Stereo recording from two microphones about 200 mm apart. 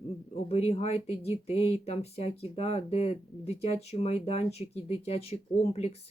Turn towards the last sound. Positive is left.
turn(degrees=30)  # may be behind; listen again after turning